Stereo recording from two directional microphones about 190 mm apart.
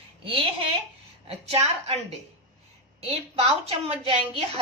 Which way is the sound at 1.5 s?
35° right (ahead or behind).